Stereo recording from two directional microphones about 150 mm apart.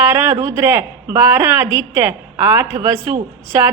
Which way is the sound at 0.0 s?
15° right (ahead or behind).